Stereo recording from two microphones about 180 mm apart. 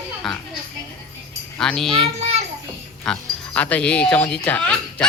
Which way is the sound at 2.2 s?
35° right (ahead or behind).